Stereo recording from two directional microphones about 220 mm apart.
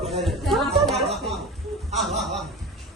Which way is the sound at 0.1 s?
Centre (ahead or behind).